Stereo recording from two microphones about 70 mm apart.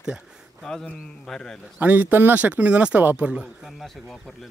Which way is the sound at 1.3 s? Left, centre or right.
Centre.